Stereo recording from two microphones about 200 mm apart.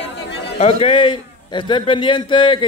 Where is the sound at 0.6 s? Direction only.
30° left (ahead or behind).